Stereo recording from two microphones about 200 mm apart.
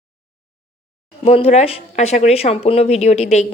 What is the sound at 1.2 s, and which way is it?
Speech, 30° left (ahead or behind).